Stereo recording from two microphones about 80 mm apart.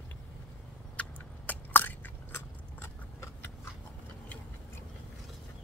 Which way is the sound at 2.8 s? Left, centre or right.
Left.